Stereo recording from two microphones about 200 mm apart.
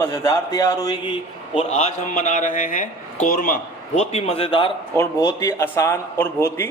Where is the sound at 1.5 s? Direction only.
35° left (ahead or behind).